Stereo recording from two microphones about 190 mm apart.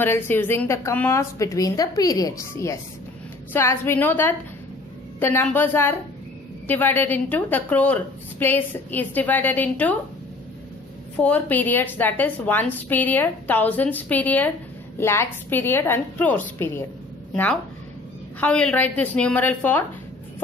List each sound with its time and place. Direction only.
0.0 s a woman's voice: 10° left (ahead or behind)
11.1 s a woman's voice: 10° left (ahead or behind)
18.4 s a woman's voice: 5° left (ahead or behind)